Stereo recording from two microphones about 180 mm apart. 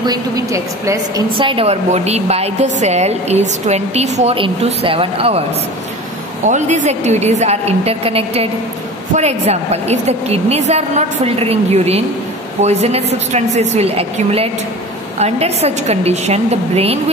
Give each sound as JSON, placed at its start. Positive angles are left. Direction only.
{"t": 0.0, "sound": "a woman's voice", "side_deg": -20}
{"t": 6.4, "sound": "a woman's voice", "side_deg": -40}